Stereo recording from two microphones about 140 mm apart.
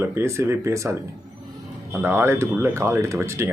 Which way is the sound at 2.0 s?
15° right (ahead or behind).